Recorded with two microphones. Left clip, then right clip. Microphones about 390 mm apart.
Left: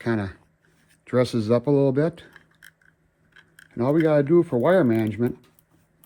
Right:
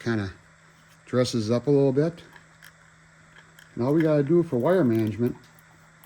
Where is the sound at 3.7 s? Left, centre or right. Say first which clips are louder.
Left 3 dB; centre.